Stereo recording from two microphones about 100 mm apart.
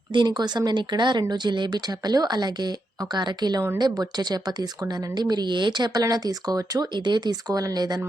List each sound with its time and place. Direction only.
0.1 s speech: 50° right (ahead or behind)
5.9 s speech: 35° right (ahead or behind)